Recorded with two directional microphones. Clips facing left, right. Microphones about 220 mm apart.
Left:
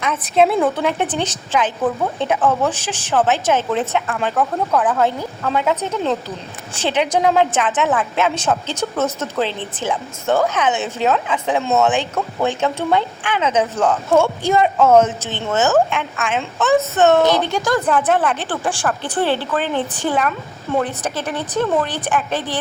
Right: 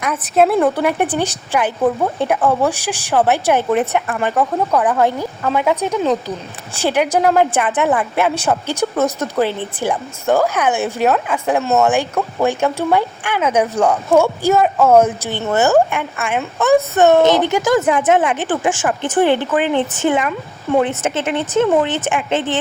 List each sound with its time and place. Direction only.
0.0 s a woman's voice: 5° right (ahead or behind)
17.7 s a woman's voice: 10° right (ahead or behind)
18.1 s a woman's voice: 20° right (ahead or behind)